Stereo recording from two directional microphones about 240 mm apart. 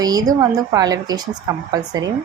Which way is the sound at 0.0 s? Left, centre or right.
Centre.